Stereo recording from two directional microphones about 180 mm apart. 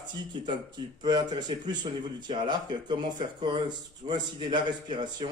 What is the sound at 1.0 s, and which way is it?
A man's voice, 25° right (ahead or behind).